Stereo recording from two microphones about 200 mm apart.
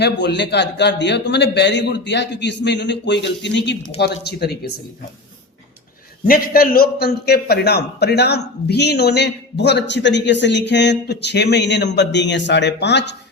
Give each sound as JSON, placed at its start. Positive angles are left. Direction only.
{"t": 0.0, "sound": "a man's voice", "side_deg": 60}
{"t": 6.2, "sound": "a man's voice", "side_deg": 45}